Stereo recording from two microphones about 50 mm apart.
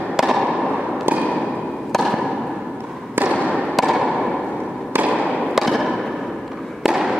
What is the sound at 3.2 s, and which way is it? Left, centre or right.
Fireworks, right.